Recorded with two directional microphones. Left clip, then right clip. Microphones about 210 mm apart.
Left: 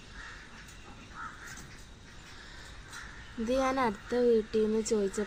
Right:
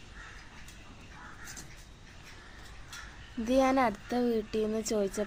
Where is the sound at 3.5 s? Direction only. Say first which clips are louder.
Right 3 dB; 60° right (ahead or behind).